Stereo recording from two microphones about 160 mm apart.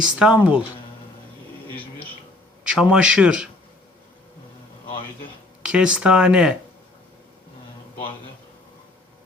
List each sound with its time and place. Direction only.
0.0 s speech: 5° right (ahead or behind)
2.6 s speech: 5° right (ahead or behind)
4.9 s a man's voice: 30° left (ahead or behind)
5.6 s speech: 5° right (ahead or behind)